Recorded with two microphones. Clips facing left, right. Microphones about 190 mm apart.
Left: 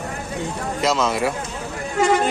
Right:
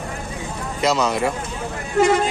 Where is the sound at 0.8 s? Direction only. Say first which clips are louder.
Right 1 dB; centre (ahead or behind).